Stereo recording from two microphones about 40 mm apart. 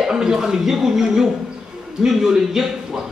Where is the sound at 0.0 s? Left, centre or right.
Centre.